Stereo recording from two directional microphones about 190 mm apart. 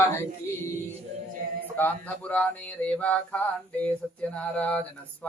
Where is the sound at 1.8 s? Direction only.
10° left (ahead or behind).